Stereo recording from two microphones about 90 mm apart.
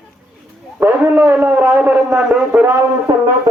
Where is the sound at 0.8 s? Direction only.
20° right (ahead or behind).